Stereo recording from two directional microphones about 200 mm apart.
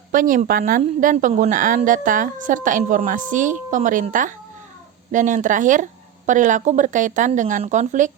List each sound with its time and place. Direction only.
0.1 s a woman's voice: 45° right (ahead or behind)